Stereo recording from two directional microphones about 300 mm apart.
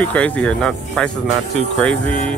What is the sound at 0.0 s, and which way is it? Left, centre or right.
Speech, centre.